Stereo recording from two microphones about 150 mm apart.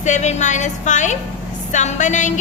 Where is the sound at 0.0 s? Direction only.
50° left (ahead or behind).